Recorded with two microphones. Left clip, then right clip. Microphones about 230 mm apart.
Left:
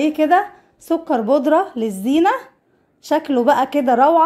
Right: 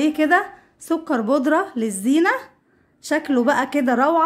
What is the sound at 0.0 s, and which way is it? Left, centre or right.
A woman's voice, centre.